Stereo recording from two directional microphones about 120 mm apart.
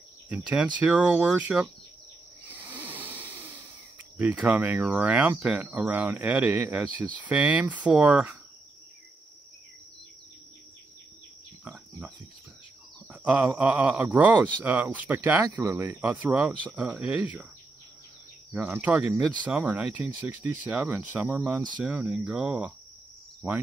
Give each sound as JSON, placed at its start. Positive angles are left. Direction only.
{"t": 0.3, "sound": "speech", "side_deg": -10}
{"t": 2.7, "sound": "a sound", "side_deg": -15}
{"t": 4.2, "sound": "speech", "side_deg": -10}
{"t": 13.1, "sound": "speech", "side_deg": -10}
{"t": 18.5, "sound": "speech", "side_deg": -15}